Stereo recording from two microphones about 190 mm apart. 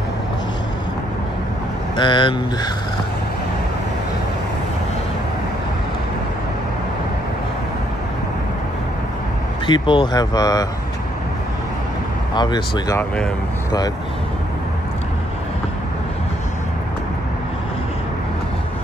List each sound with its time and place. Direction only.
2.0 s speech: 25° left (ahead or behind)
9.7 s speech: 25° left (ahead or behind)
12.4 s speech: 25° left (ahead or behind)